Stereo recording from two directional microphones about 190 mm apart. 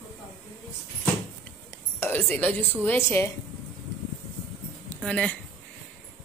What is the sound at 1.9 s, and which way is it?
Speech, 10° left (ahead or behind).